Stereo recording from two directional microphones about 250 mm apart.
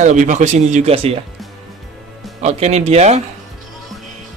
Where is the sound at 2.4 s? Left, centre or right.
Right.